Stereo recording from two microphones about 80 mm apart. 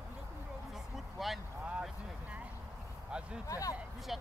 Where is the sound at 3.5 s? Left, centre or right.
Left.